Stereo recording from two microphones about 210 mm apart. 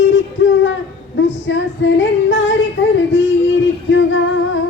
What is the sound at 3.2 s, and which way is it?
Music, 60° left (ahead or behind).